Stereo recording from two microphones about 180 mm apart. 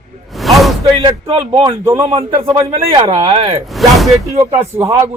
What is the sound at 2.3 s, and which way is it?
Speech, 30° right (ahead or behind).